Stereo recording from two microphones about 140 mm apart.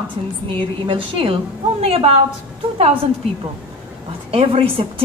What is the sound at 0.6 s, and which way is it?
A woman's voice, 40° right (ahead or behind).